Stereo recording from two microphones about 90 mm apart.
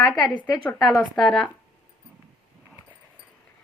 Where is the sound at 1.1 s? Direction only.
Centre (ahead or behind).